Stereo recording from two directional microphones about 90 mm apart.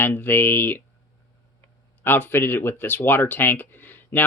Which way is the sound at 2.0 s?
25° left (ahead or behind).